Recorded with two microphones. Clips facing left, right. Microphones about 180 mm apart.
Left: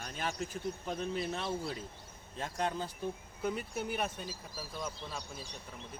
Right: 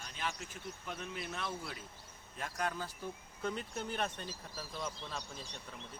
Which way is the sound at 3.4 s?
10° left (ahead or behind).